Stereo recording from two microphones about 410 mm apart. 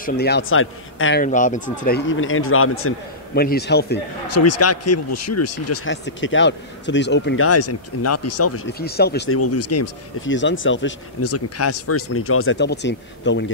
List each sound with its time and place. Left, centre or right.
0.0 s speech: left
4.3 s speech: left